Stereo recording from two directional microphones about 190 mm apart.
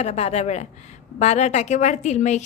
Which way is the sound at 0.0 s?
35° left (ahead or behind).